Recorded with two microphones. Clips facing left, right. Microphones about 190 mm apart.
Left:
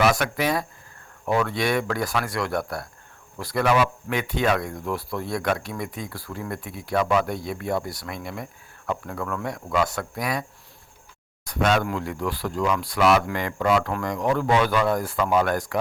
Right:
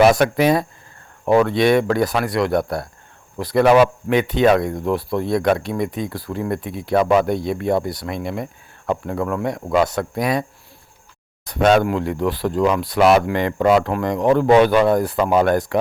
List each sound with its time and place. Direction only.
0.0 s speech: 25° right (ahead or behind)
9.6 s speech: 35° right (ahead or behind)
9.8 s speech: 25° right (ahead or behind)
11.4 s a sound: 25° right (ahead or behind)
11.8 s speech: 25° right (ahead or behind)